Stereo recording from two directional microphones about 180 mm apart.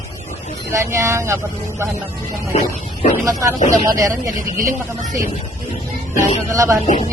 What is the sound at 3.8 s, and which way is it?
Speech, 20° right (ahead or behind).